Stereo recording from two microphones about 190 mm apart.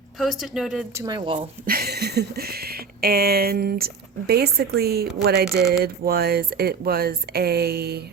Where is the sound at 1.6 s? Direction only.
50° right (ahead or behind).